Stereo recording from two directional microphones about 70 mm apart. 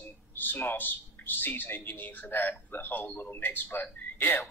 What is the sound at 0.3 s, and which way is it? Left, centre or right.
A man's voice, left.